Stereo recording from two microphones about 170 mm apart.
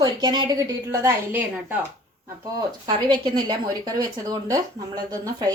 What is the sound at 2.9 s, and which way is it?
A woman's voice, 25° right (ahead or behind).